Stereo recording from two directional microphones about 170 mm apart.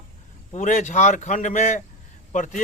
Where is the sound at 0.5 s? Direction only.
50° left (ahead or behind).